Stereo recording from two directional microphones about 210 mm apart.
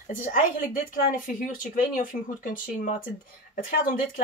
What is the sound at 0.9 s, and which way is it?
Speech, 40° left (ahead or behind).